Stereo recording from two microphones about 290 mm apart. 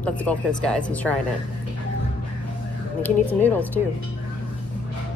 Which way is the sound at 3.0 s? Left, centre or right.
Centre.